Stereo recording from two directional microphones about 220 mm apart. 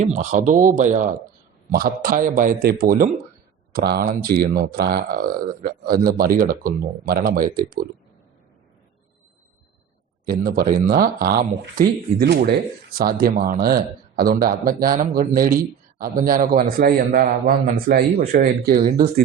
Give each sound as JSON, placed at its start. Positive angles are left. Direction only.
{"t": 0.0, "sound": "speech", "side_deg": -30}
{"t": 10.2, "sound": "speech", "side_deg": -40}